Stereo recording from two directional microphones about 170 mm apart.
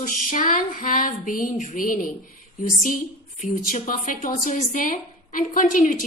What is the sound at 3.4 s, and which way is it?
A woman's voice, 50° left (ahead or behind).